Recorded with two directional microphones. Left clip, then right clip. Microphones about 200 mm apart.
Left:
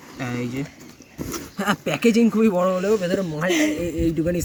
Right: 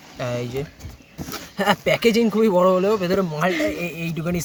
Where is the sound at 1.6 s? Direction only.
60° right (ahead or behind).